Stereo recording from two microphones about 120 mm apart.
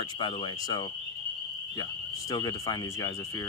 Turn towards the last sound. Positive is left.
turn(degrees=30)  # may be behind; listen again after turning